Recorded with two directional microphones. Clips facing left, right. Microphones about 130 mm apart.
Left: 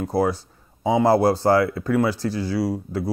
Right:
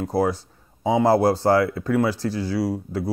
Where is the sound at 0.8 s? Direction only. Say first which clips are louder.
Even; 15° left (ahead or behind).